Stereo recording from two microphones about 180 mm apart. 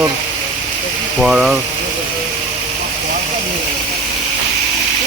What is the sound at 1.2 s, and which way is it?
Speech, 5° right (ahead or behind).